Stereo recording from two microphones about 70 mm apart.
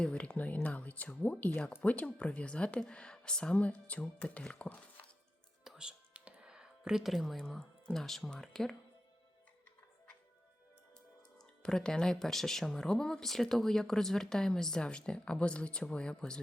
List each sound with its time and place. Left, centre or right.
0.0 s speech: centre
5.6 s music: centre
11.3 s speech: centre